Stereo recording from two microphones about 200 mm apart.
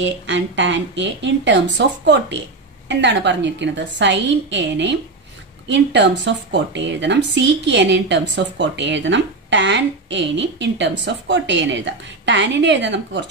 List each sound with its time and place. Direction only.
0.0 s a woman's voice: 65° right (ahead or behind)